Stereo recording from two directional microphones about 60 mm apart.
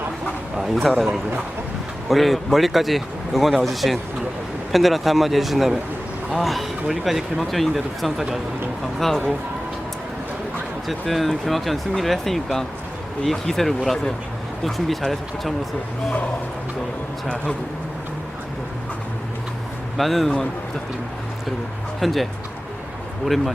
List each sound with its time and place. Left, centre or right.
0.8 s speech: centre
10.8 s speech: centre
17.2 s speech: centre
20.0 s speech: centre
22.0 s speech: centre